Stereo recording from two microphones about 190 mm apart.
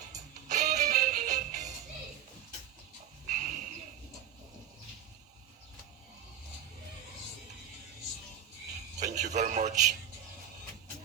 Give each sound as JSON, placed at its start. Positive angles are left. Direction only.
{"t": 0.4, "sound": "music", "side_deg": -40}
{"t": 3.2, "sound": "a sound", "side_deg": -40}
{"t": 9.0, "sound": "a man's voice", "side_deg": -40}